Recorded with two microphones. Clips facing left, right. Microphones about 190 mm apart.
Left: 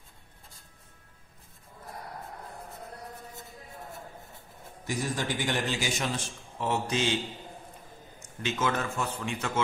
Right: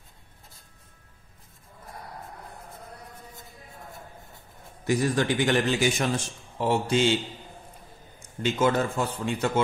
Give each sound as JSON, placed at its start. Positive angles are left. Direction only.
{"t": 4.8, "sound": "a man's voice", "side_deg": -70}
{"t": 6.6, "sound": "speech", "side_deg": -30}
{"t": 8.4, "sound": "speech", "side_deg": -35}